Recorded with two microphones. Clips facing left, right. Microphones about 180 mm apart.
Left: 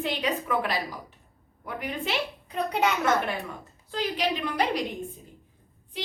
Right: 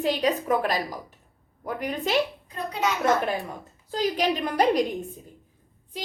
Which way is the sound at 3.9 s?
45° right (ahead or behind).